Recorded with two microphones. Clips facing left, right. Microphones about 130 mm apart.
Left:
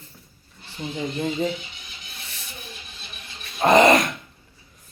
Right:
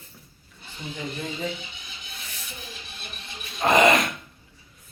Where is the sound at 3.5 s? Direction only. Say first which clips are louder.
Left 4 dB; 35° left (ahead or behind).